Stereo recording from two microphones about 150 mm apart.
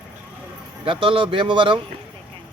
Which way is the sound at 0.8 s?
35° right (ahead or behind).